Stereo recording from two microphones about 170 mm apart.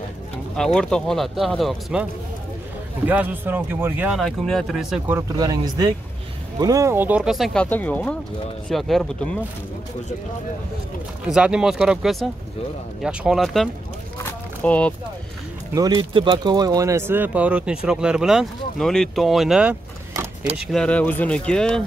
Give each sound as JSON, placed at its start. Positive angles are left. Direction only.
{"t": 0.7, "sound": "speech", "side_deg": 5}
{"t": 3.1, "sound": "speech", "side_deg": -10}
{"t": 4.2, "sound": "speech", "side_deg": 0}
{"t": 5.0, "sound": "speech", "side_deg": -15}
{"t": 5.4, "sound": "speech", "side_deg": -25}
{"t": 7.6, "sound": "speech", "side_deg": 10}
{"t": 11.2, "sound": "speech", "side_deg": -5}
{"t": 14.2, "sound": "a sound", "side_deg": 10}
{"t": 15.7, "sound": "speech", "side_deg": -25}